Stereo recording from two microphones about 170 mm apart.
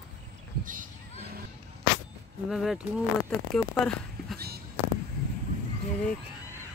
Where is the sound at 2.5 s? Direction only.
Centre (ahead or behind).